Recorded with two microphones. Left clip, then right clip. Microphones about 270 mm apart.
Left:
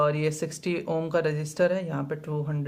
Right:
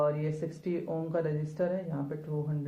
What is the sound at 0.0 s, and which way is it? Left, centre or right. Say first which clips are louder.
Speech: left 5 dB; left.